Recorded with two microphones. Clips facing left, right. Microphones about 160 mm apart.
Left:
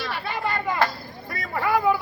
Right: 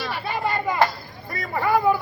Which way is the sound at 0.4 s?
15° right (ahead or behind).